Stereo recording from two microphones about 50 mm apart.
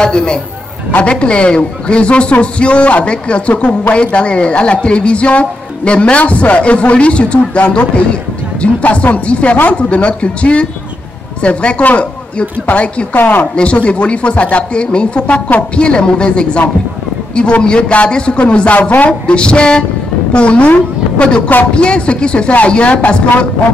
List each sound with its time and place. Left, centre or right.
0.0 s a man's voice: centre
13.1 s speech: left
13.6 s a man's voice: left
18.8 s speech: left
19.0 s a man's voice: left
21.7 s a man's voice: left